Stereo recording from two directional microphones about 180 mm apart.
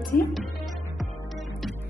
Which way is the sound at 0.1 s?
55° left (ahead or behind).